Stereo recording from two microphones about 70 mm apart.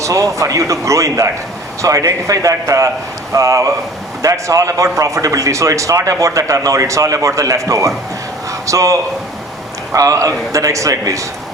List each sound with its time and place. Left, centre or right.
0.0 s a man's voice: right